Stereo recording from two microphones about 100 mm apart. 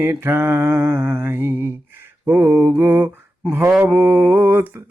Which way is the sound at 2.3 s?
20° right (ahead or behind).